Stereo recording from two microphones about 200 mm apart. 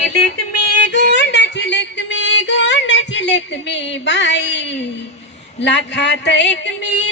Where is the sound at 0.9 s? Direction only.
60° left (ahead or behind).